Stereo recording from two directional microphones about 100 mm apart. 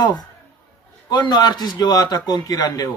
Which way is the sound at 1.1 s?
45° left (ahead or behind).